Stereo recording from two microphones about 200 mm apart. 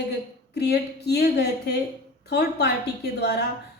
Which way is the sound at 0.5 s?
55° left (ahead or behind).